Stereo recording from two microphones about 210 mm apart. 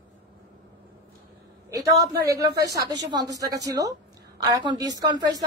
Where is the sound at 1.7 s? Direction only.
15° right (ahead or behind).